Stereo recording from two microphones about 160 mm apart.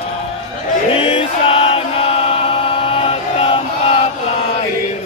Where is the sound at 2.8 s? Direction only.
35° left (ahead or behind).